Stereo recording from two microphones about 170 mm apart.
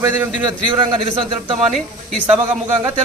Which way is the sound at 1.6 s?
Centre (ahead or behind).